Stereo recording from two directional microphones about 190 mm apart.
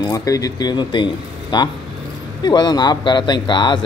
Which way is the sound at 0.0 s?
20° left (ahead or behind).